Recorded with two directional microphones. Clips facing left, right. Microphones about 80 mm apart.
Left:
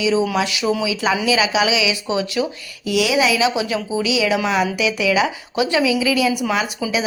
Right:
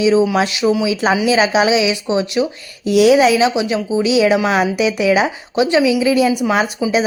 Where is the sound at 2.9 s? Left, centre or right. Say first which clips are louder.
Right 7 dB; right.